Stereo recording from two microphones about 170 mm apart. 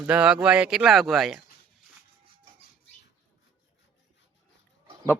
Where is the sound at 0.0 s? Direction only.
5° right (ahead or behind).